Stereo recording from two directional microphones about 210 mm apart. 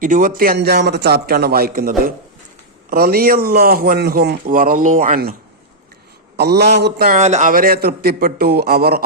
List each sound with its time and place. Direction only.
0.0 s a man's voice: 40° right (ahead or behind)
7.1 s a man's voice: 35° right (ahead or behind)